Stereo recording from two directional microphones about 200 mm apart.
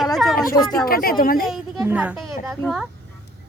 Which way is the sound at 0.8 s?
45° left (ahead or behind).